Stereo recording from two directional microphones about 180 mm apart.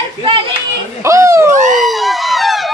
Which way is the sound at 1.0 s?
15° right (ahead or behind).